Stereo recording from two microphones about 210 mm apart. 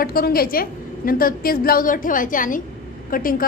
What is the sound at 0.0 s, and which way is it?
A woman's voice, 45° left (ahead or behind).